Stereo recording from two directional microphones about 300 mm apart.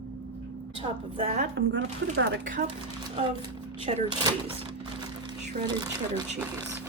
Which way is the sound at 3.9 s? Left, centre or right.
Centre.